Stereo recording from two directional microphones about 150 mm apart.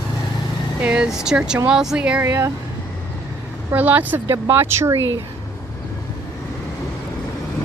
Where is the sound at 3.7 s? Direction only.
10° right (ahead or behind).